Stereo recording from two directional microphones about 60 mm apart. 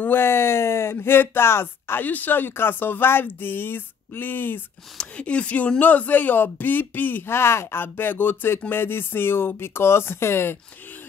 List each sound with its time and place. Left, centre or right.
0.0 s a sound: left
0.9 s speech: left
2.0 s speech: left
4.9 s speech: centre; by 10.6 s left